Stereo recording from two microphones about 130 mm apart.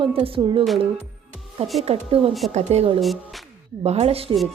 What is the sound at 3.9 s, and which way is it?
Speech, 50° right (ahead or behind).